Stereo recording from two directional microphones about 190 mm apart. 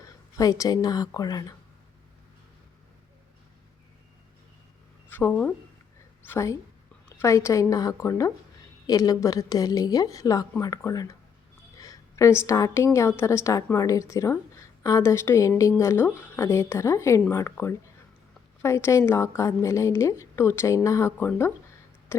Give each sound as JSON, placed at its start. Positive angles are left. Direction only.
{"t": 0.0, "sound": "speech", "side_deg": 20}
{"t": 5.0, "sound": "a woman's voice", "side_deg": 10}
{"t": 22.1, "sound": "a sound", "side_deg": 15}